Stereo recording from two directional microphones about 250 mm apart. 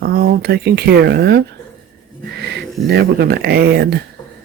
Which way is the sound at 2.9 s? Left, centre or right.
Right.